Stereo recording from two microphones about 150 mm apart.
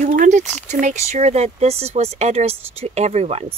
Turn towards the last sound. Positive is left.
turn(degrees=-45)  # may be behind; listen again after turning